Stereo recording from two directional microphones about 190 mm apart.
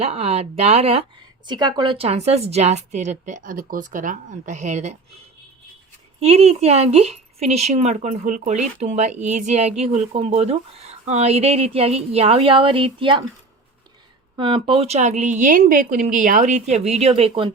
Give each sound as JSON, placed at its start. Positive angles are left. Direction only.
{"t": 0.0, "sound": "a woman's voice", "side_deg": -35}
{"t": 1.5, "sound": "a woman's voice", "side_deg": -25}
{"t": 6.1, "sound": "a woman's voice", "side_deg": -35}
{"t": 14.3, "sound": "a woman's voice", "side_deg": -30}